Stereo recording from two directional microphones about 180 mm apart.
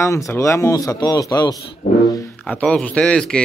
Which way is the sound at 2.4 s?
5° left (ahead or behind).